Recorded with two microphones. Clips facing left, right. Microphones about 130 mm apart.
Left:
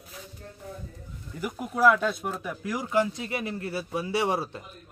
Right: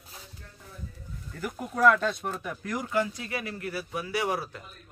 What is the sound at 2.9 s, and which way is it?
A man's voice, 25° left (ahead or behind).